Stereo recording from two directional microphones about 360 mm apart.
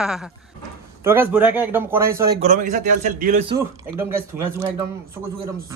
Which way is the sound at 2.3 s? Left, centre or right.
Right.